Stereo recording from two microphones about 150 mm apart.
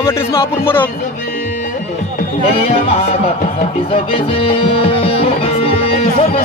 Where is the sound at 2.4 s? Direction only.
40° left (ahead or behind).